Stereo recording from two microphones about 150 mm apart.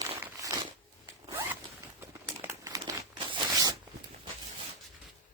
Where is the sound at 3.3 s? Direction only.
25° right (ahead or behind).